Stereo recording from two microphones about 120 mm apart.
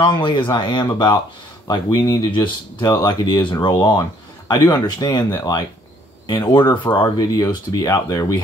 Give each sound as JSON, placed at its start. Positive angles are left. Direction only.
{"t": 0.0, "sound": "speech", "side_deg": 40}